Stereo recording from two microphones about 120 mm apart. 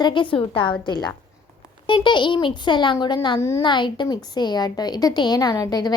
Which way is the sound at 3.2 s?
25° left (ahead or behind).